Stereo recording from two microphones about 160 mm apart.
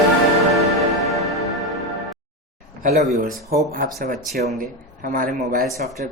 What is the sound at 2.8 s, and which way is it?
Speech, 55° right (ahead or behind).